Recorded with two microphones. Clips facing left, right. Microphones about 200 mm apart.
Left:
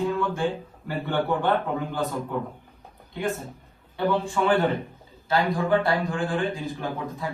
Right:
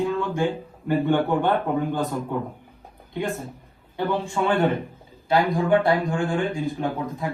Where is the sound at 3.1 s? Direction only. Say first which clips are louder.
Right 1 dB; 15° right (ahead or behind).